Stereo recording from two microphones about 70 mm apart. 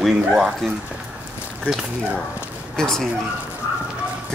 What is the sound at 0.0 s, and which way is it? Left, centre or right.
Speech, centre.